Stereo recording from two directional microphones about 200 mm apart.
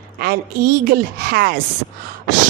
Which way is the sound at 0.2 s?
50° right (ahead or behind).